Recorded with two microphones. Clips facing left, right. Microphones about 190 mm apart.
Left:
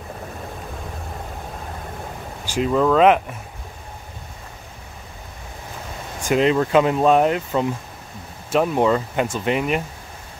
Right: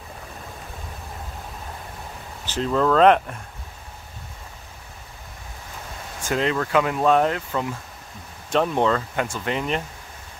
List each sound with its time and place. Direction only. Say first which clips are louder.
2.4 s speech: left 3 dB; 10° left (ahead or behind)
6.2 s speech: left 6 dB; 20° left (ahead or behind)
8.5 s speech: left 3 dB; 10° left (ahead or behind)